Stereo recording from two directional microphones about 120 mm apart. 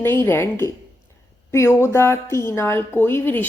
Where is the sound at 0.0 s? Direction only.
15° left (ahead or behind).